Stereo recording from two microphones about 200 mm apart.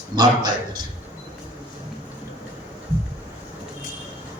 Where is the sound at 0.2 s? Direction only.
20° right (ahead or behind).